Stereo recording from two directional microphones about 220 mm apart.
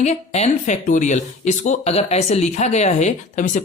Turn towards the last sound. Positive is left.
turn(degrees=35)  # may be behind; listen again after turning